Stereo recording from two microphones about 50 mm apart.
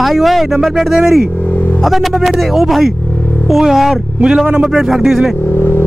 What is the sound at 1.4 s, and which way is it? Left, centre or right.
Vehicle, left.